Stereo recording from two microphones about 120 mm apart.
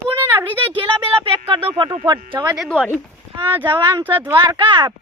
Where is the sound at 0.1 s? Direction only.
15° right (ahead or behind).